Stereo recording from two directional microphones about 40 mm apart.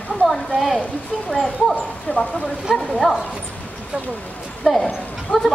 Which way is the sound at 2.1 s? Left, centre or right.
Left.